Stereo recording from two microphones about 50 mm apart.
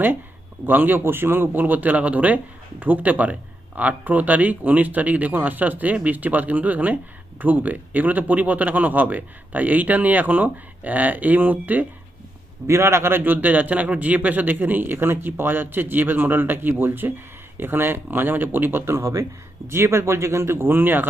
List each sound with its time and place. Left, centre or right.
0.6 s speech: right
12.6 s a man's voice: right